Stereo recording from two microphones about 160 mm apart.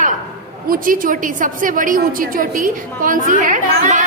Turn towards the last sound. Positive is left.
turn(degrees=-50)  # may be behind; listen again after turning